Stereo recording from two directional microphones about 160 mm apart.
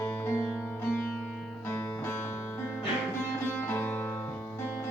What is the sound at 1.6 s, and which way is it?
Music, 15° left (ahead or behind).